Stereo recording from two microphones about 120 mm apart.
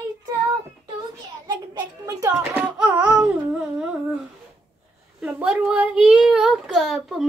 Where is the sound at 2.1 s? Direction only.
30° right (ahead or behind).